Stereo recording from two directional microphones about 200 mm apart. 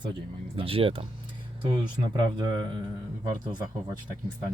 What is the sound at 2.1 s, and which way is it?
Speech, 20° right (ahead or behind).